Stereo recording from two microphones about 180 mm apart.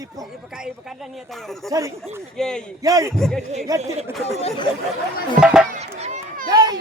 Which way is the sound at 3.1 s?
Centre (ahead or behind).